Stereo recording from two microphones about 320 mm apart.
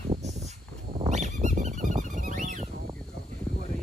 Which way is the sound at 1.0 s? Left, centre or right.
Right.